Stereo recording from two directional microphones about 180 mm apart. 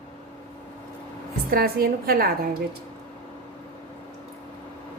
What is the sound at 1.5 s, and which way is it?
A woman's voice, 55° right (ahead or behind).